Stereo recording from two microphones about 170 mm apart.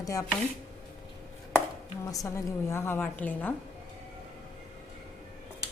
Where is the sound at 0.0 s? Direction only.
20° left (ahead or behind).